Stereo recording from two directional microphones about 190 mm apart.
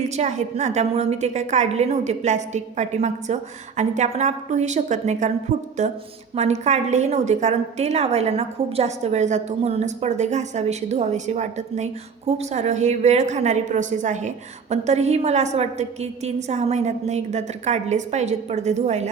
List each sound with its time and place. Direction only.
0.0 s a woman's voice: 35° right (ahead or behind)